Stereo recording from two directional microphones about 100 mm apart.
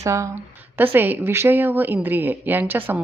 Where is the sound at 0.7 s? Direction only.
20° right (ahead or behind).